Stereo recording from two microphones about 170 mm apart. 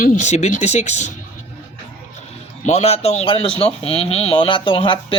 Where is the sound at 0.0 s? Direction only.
45° left (ahead or behind).